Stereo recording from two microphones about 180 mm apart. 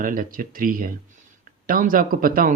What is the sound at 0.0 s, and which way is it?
Speech, 50° right (ahead or behind).